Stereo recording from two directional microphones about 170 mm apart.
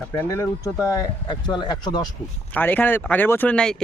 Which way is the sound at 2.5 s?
10° left (ahead or behind).